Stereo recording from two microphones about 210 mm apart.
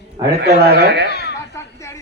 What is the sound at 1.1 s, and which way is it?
Chatter, 50° left (ahead or behind).